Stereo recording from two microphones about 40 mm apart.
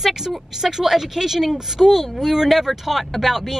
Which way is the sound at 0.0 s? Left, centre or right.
Centre.